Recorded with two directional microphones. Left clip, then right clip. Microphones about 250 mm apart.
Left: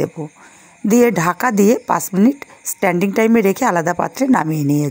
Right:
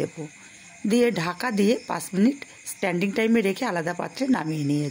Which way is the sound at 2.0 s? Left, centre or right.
Centre.